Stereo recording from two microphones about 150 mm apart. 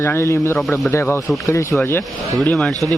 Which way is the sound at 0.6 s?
Centre (ahead or behind).